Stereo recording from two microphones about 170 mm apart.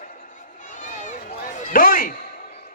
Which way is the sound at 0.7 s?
50° left (ahead or behind).